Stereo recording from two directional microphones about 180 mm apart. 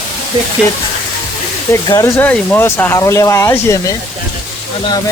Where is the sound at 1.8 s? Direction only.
20° left (ahead or behind).